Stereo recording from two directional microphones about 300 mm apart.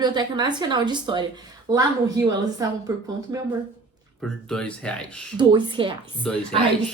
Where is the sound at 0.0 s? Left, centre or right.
Centre.